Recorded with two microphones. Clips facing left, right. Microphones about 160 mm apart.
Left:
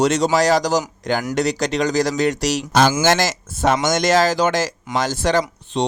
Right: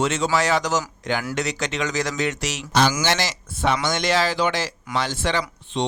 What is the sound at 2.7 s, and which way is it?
Speech, 50° left (ahead or behind).